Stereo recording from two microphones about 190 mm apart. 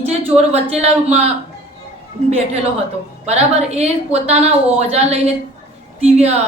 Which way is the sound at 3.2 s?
35° right (ahead or behind).